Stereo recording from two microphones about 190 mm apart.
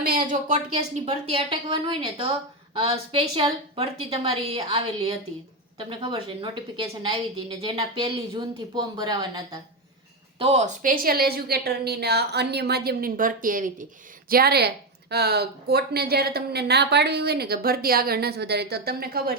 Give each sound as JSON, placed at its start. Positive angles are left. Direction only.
{"t": 0.3, "sound": "a woman's voice", "side_deg": -40}
{"t": 7.8, "sound": "a woman's voice", "side_deg": -25}
{"t": 10.3, "sound": "a woman's voice", "side_deg": -30}